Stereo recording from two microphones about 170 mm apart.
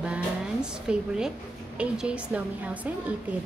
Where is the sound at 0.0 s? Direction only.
5° right (ahead or behind).